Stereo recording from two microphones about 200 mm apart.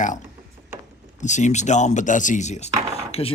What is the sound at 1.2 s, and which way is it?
A man's voice, 35° left (ahead or behind).